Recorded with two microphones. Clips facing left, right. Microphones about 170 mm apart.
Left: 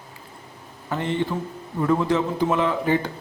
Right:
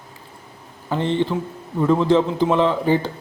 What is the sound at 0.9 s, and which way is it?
A man's voice, 30° right (ahead or behind).